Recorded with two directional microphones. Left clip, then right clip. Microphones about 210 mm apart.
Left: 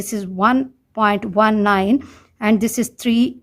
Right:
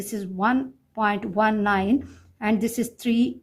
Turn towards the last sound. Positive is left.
turn(degrees=35)  # may be behind; listen again after turning